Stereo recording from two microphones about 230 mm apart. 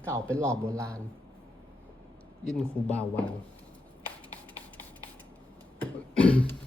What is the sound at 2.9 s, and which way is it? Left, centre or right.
Speech, centre.